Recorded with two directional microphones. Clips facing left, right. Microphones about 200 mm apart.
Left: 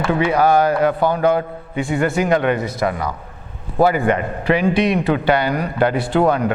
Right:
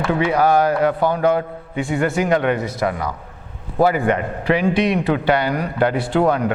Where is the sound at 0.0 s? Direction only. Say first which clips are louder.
Left 1 dB; 15° left (ahead or behind).